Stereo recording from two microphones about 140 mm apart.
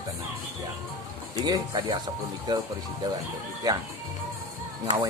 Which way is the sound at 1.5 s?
30° right (ahead or behind).